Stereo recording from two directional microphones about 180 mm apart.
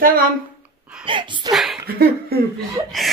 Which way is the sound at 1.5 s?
Centre (ahead or behind).